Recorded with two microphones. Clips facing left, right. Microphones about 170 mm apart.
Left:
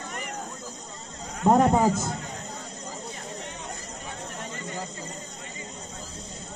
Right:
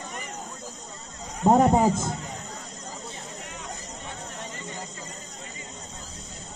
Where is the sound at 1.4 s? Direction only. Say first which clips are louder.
Right 1 dB; 20° right (ahead or behind).